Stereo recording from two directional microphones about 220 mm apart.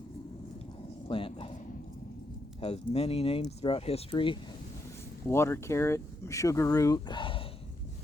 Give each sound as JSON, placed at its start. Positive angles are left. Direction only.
{"t": 1.0, "sound": "speech", "side_deg": 25}
{"t": 2.6, "sound": "speech", "side_deg": 25}
{"t": 5.3, "sound": "speech", "side_deg": 10}